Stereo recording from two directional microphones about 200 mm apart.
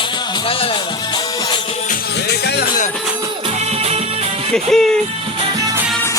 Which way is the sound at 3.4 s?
30° right (ahead or behind).